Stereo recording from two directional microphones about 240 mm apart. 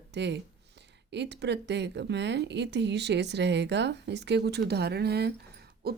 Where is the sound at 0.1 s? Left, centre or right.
Right.